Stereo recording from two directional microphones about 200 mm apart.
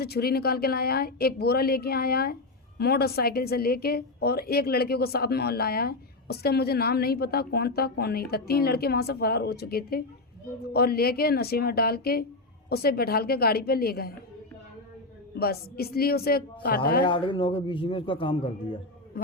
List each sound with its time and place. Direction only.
0.0 s speech: 50° left (ahead or behind)
15.4 s speech: 50° left (ahead or behind)
17.1 s a man's voice: 25° left (ahead or behind)
19.1 s a man's voice: 50° left (ahead or behind)